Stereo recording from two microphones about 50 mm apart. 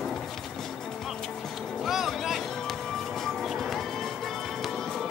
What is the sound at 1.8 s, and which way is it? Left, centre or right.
Music, centre.